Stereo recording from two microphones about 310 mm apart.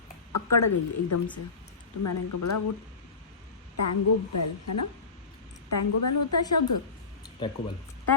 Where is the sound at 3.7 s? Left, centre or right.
Left.